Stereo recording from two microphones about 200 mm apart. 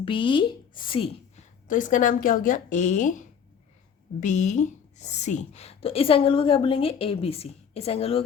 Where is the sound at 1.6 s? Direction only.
40° left (ahead or behind).